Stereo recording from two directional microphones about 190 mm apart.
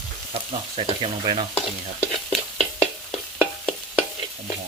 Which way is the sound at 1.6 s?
5° left (ahead or behind).